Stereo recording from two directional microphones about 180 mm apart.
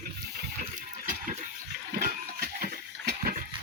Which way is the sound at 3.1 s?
55° right (ahead or behind).